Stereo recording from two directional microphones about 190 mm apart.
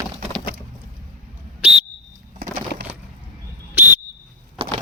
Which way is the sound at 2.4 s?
50° right (ahead or behind).